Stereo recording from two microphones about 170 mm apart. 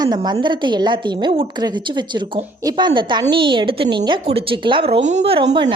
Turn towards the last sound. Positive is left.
turn(degrees=-30)  # may be behind; listen again after turning